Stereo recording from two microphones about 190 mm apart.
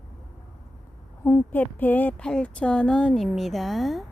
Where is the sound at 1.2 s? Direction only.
10° left (ahead or behind).